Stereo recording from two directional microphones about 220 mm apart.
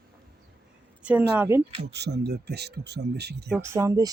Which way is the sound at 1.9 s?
50° right (ahead or behind).